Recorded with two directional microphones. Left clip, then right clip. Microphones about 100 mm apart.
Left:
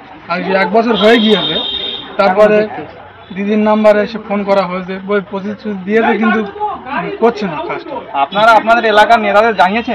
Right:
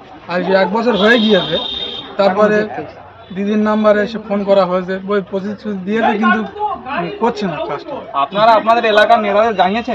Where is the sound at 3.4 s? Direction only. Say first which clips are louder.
Left 4 dB; 35° right (ahead or behind).